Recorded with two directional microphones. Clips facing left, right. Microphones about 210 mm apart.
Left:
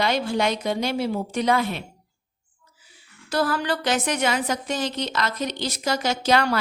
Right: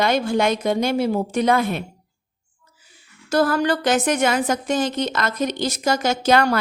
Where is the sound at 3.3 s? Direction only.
45° right (ahead or behind).